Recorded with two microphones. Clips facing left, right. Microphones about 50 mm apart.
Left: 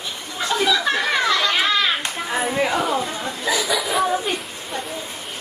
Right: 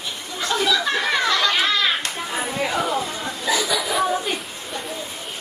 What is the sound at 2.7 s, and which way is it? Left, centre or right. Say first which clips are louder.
Chuckle: left 2 dB; centre.